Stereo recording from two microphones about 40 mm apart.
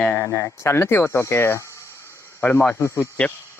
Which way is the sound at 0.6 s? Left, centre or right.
Left.